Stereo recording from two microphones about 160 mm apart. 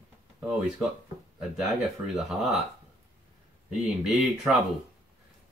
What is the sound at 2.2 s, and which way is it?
Speech, centre (ahead or behind).